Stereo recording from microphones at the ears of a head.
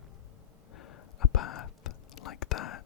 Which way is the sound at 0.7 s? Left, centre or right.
Left.